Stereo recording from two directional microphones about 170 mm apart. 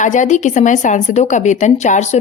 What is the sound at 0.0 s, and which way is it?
A woman's voice, 45° left (ahead or behind).